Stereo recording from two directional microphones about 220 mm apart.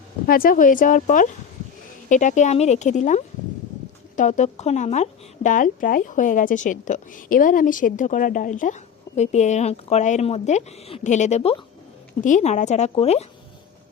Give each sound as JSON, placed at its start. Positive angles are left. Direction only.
{"t": 0.3, "sound": "a woman's voice", "side_deg": 40}